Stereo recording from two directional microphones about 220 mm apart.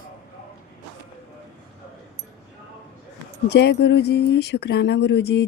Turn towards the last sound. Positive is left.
turn(degrees=50)  # may be behind; listen again after turning